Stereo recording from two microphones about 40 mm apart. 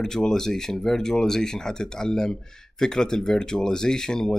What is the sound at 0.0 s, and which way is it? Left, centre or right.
Speech, centre.